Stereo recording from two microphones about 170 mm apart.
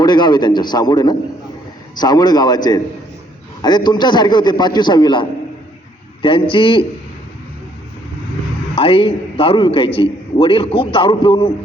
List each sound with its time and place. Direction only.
0.0 s a man's voice: 25° left (ahead or behind)
6.2 s a man's voice: 30° left (ahead or behind)
8.7 s a man's voice: 30° left (ahead or behind)